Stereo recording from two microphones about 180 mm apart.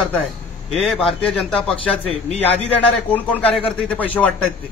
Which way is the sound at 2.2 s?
35° left (ahead or behind).